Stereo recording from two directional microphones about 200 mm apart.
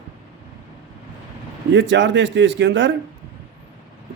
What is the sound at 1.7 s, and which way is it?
Speech, 65° right (ahead or behind).